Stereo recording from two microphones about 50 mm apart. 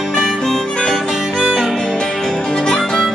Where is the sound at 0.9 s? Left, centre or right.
Centre.